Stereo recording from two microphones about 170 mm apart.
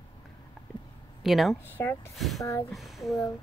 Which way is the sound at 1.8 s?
15° left (ahead or behind).